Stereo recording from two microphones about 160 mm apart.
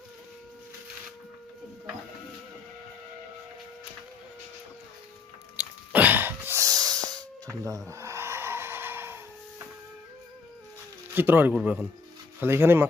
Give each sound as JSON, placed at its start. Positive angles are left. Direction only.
{"t": 5.5, "sound": "a sound", "side_deg": -10}
{"t": 7.9, "sound": "skidding", "side_deg": -15}
{"t": 11.1, "sound": "a man's voice", "side_deg": -15}